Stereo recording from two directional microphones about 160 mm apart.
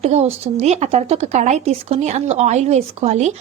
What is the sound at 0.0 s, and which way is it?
A woman's voice, 40° right (ahead or behind).